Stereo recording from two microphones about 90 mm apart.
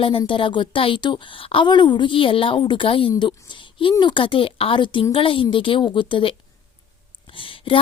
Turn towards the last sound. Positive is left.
turn(degrees=75)  # may be behind; listen again after turning